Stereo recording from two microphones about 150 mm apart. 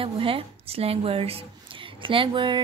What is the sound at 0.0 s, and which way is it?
Speech, 40° right (ahead or behind).